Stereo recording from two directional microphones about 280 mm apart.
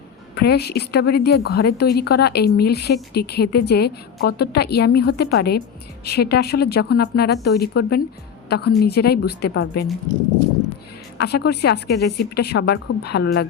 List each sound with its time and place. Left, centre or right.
0.3 s a woman's voice: left
11.2 s a woman's voice: left